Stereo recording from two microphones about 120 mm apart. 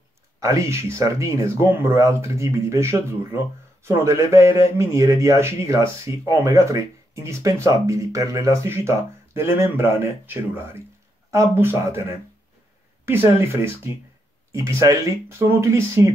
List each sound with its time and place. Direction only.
0.4 s a man's voice: 25° right (ahead or behind)
13.0 s a man's voice: 20° right (ahead or behind)